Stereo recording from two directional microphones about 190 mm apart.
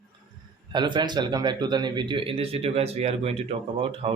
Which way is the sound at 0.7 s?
25° right (ahead or behind).